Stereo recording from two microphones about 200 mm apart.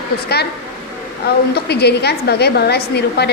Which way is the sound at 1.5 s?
55° left (ahead or behind).